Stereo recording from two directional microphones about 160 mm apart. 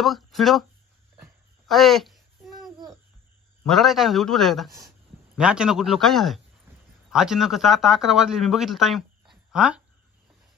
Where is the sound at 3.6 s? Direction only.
Centre (ahead or behind).